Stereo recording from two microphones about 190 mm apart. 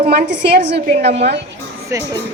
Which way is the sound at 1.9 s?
15° right (ahead or behind).